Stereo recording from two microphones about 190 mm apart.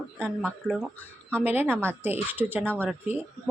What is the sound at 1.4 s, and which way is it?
A woman's voice, 10° right (ahead or behind).